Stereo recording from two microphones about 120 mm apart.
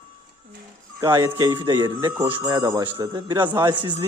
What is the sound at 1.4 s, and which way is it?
A man's voice, 35° right (ahead or behind).